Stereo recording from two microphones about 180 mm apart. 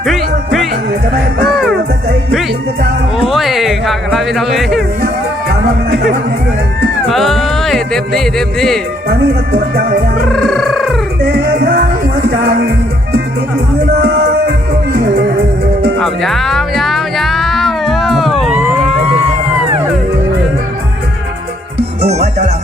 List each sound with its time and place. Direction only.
0.0 s music: centre (ahead or behind)
3.2 s music: centre (ahead or behind)
7.1 s speech: centre (ahead or behind)
9.0 s music: 60° right (ahead or behind)
10.3 s music: centre (ahead or behind)
11.6 s music: 60° right (ahead or behind)
14.0 s music: 65° right (ahead or behind)
16.0 s music: centre (ahead or behind)
22.0 s music: 35° right (ahead or behind)